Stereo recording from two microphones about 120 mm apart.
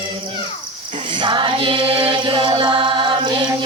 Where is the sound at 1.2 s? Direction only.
40° right (ahead or behind).